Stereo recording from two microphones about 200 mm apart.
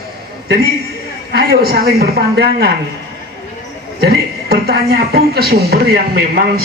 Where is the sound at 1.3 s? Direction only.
50° right (ahead or behind).